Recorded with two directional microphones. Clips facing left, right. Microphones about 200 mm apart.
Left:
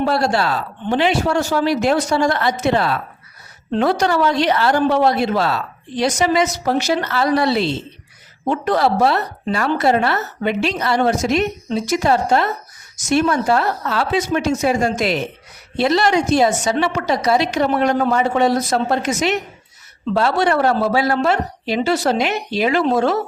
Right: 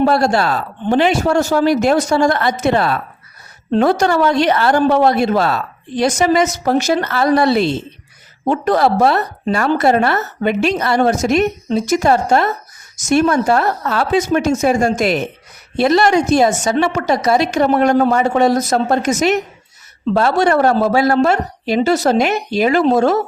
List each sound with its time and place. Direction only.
0.0 s speech: 45° right (ahead or behind)